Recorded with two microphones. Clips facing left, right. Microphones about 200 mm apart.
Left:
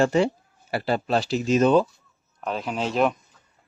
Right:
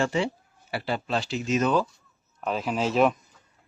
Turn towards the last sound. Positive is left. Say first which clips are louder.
# right 1 dB
turn(degrees=0)  # may be behind; listen again after turning